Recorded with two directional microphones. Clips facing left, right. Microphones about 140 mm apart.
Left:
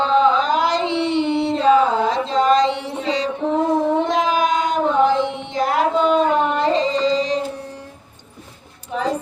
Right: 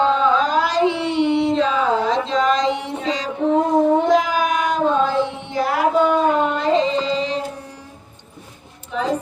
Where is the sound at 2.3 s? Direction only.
30° left (ahead or behind).